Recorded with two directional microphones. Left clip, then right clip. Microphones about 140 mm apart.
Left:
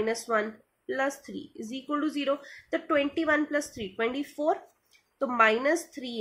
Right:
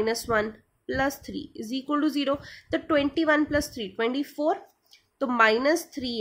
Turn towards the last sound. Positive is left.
turn(degrees=-30)  # may be behind; listen again after turning